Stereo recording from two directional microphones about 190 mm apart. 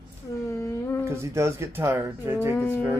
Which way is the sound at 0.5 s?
15° left (ahead or behind).